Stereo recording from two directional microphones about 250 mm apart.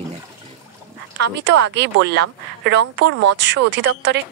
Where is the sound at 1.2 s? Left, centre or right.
Right.